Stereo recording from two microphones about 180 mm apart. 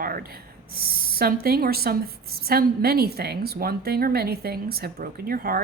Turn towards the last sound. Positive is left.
turn(degrees=-55)  # may be behind; listen again after turning